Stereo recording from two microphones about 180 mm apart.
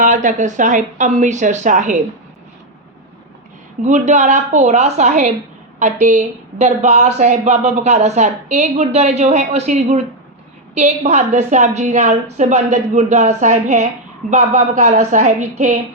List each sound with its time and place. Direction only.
0.0 s speech: 45° right (ahead or behind)
3.8 s a woman's voice: 40° right (ahead or behind)